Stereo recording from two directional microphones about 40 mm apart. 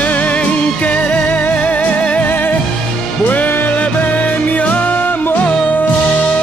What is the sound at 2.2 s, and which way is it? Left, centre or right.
Music, left.